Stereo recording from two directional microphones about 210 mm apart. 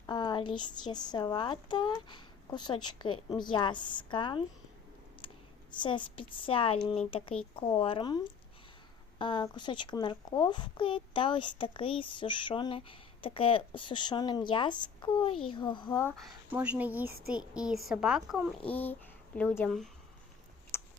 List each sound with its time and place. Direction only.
0.0 s speech: 20° left (ahead or behind)
5.8 s speech: 25° left (ahead or behind)
16.2 s speech: 10° right (ahead or behind)
20.7 s a sound: 10° left (ahead or behind)